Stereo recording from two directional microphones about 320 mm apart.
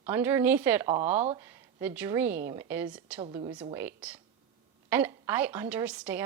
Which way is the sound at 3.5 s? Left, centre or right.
Centre.